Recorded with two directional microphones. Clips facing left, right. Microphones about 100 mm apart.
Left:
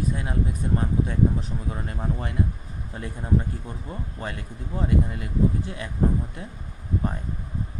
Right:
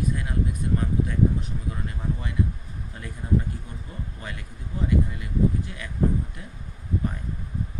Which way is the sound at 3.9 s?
35° left (ahead or behind).